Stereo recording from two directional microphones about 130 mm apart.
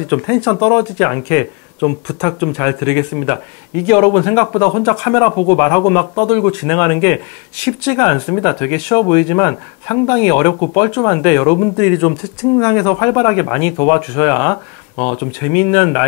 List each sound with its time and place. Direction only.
0.1 s speech: 20° left (ahead or behind)